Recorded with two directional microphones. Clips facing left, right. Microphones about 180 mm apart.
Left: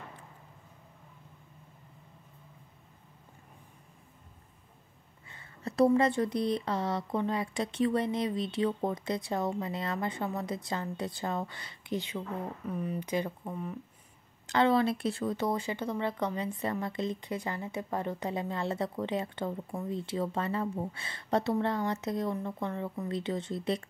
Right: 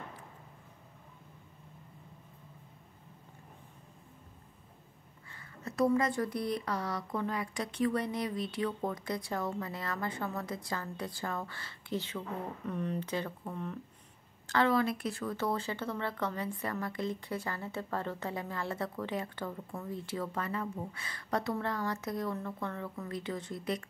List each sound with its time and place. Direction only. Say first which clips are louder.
5.3 s speech: left 4 dB; 30° left (ahead or behind)
12.6 s speech: right 2 dB; 5° left (ahead or behind)
14.5 s speech: left 3 dB; 25° left (ahead or behind)